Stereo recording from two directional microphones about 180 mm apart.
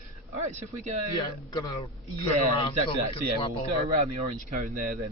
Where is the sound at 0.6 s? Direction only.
40° right (ahead or behind).